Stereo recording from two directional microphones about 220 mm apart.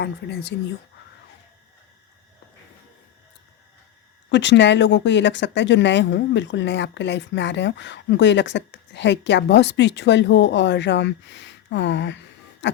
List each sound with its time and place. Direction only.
0.0 s speech: 50° left (ahead or behind)
4.3 s speech: 55° left (ahead or behind)
12.6 s a sound: 55° left (ahead or behind)